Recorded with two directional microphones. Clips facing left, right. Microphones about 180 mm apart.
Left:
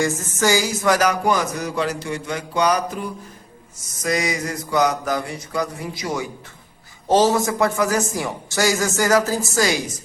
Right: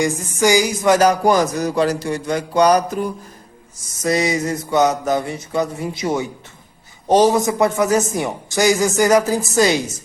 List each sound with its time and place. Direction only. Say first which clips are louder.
0.0 s music: right 3 dB; 15° right (ahead or behind)
0.9 s a sound: right 5 dB; 35° right (ahead or behind)
4.0 s a man's voice: right 4 dB; 30° right (ahead or behind)